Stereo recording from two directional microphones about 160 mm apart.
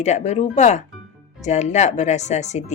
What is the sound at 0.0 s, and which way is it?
Speech, 45° left (ahead or behind).